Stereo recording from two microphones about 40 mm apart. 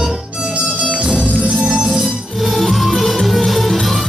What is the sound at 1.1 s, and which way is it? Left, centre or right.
Music, centre.